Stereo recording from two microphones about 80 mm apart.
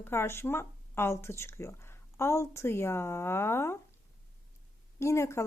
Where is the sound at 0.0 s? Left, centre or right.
Left.